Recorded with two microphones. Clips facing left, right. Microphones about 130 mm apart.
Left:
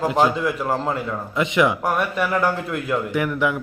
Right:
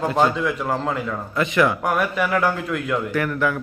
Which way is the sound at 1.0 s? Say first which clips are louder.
Even; 20° left (ahead or behind).